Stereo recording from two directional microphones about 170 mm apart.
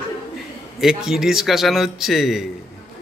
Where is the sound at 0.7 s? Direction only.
5° right (ahead or behind).